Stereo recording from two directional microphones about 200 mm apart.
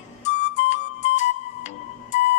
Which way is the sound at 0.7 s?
35° left (ahead or behind).